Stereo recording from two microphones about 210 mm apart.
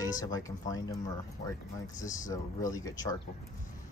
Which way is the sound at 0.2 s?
15° left (ahead or behind).